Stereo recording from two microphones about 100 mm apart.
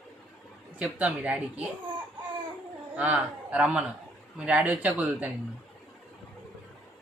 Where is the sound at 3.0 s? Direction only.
15° right (ahead or behind).